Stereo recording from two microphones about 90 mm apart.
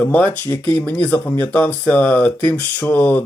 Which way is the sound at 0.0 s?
20° left (ahead or behind).